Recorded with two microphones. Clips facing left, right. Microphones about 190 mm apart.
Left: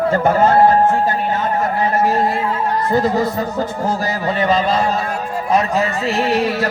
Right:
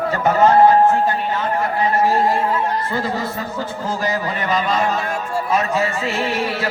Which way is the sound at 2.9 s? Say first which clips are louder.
Left 7 dB; 40° left (ahead or behind).